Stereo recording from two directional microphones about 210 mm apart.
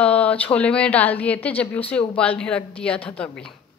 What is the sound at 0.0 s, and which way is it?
A woman's voice, 5° left (ahead or behind).